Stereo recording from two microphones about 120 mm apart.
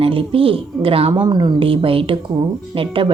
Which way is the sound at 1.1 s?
35° right (ahead or behind).